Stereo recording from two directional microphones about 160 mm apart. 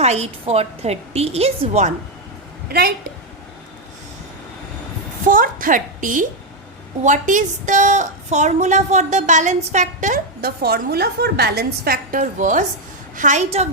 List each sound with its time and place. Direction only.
0.0 s a woman's voice: 40° right (ahead or behind)
2.6 s a woman's voice: 70° right (ahead or behind)
5.3 s a woman's voice: 60° right (ahead or behind)
10.4 s a woman's voice: 75° right (ahead or behind); by 13.7 s 45° right (ahead or behind)